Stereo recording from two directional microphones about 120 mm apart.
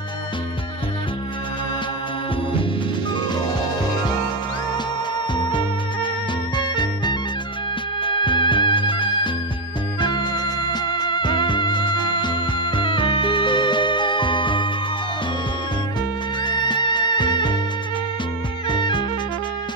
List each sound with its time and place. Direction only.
6.5 s music: 40° left (ahead or behind)
16.4 s music: 40° left (ahead or behind)
18.7 s music: 40° left (ahead or behind)